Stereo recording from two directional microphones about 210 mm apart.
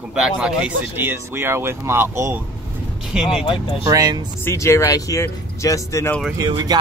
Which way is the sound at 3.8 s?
15° right (ahead or behind).